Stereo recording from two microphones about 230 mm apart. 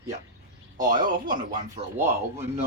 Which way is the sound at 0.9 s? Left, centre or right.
Right.